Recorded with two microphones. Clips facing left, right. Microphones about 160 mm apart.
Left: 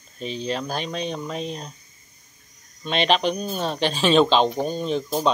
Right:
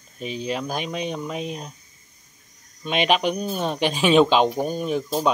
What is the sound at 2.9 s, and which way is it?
Speech, 10° right (ahead or behind).